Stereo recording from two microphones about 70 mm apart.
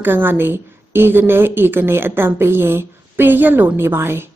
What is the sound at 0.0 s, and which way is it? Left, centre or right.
A woman's voice, right.